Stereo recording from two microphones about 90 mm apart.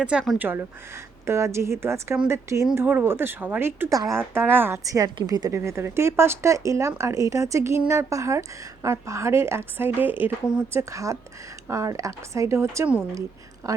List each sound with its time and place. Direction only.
0.0 s speech: 10° right (ahead or behind)
0.3 s speech: 25° right (ahead or behind)
4.9 s a woman's voice: 40° right (ahead or behind)
5.5 s speech: 30° right (ahead or behind)
10.8 s speech: 35° right (ahead or behind)